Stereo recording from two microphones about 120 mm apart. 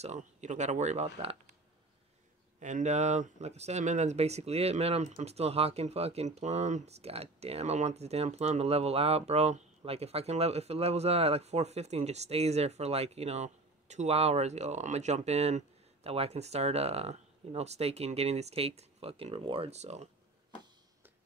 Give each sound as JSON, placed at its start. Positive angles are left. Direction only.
{"t": 0.0, "sound": "speech", "side_deg": -80}
{"t": 2.6, "sound": "speech", "side_deg": -80}